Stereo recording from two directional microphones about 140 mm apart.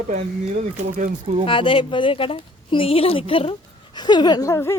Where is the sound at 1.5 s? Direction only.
40° left (ahead or behind); by 4.8 s 20° left (ahead or behind).